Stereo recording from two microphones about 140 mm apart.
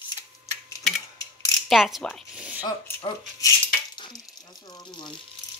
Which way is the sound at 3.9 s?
35° left (ahead or behind).